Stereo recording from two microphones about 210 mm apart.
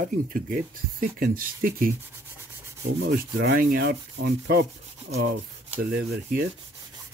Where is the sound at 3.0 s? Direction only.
55° right (ahead or behind).